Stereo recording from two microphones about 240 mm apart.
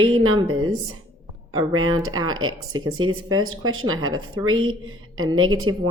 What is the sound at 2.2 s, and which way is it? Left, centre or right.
Speech, right.